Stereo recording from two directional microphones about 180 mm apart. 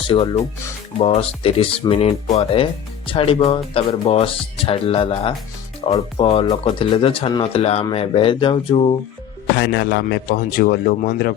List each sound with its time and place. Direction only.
0.1 s speech: 30° left (ahead or behind)
9.6 s speech: 65° left (ahead or behind)